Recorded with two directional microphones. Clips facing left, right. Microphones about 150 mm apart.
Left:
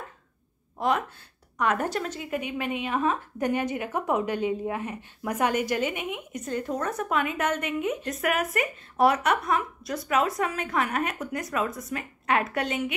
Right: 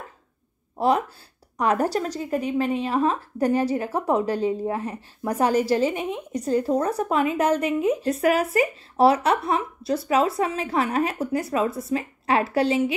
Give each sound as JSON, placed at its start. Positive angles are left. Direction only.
{"t": 0.7, "sound": "a woman's voice", "side_deg": -35}